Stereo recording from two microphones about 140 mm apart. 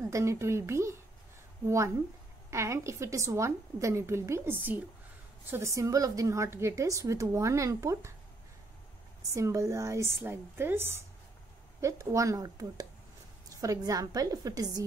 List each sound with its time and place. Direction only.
0.0 s a woman's voice: 20° right (ahead or behind)
2.5 s a woman's voice: 20° right (ahead or behind)
9.3 s a woman's voice: 20° right (ahead or behind)